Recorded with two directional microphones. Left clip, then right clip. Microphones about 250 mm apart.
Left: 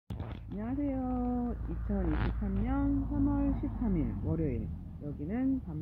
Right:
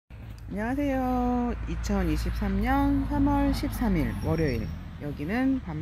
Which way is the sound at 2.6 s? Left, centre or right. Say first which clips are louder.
Right 8 dB; right.